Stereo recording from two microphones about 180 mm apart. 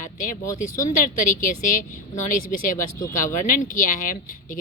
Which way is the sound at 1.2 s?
45° left (ahead or behind).